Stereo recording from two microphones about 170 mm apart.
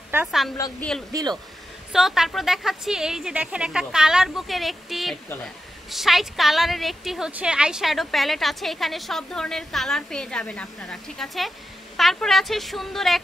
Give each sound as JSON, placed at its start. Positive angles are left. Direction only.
{"t": 0.1, "sound": "a woman's voice", "side_deg": -10}
{"t": 0.7, "sound": "a woman's voice", "side_deg": 5}